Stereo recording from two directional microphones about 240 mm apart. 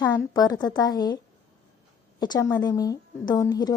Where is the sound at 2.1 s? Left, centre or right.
Centre.